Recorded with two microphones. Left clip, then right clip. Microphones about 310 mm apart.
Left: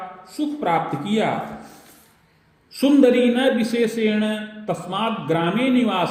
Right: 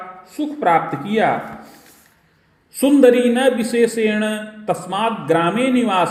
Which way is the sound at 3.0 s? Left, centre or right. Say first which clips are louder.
Right 4 dB; right.